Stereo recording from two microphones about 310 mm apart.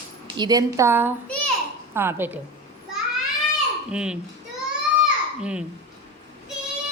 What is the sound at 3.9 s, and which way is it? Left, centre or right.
Speech, centre.